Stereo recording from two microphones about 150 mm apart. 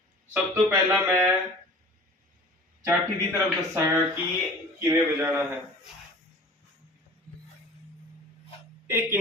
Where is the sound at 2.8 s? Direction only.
10° right (ahead or behind).